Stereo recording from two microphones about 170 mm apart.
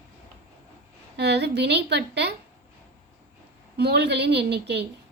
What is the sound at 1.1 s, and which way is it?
A woman's voice, 80° right.